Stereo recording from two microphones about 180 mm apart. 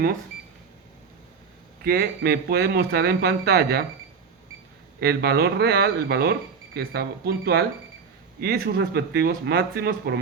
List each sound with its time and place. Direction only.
1.8 s speech: 60° right (ahead or behind)
4.9 s speech: 60° right (ahead or behind)